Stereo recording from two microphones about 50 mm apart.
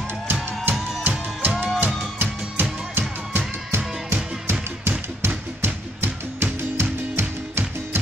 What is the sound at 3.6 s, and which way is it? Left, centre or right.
Music, right.